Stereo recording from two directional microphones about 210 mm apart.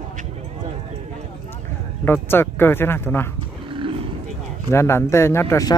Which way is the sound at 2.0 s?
10° left (ahead or behind).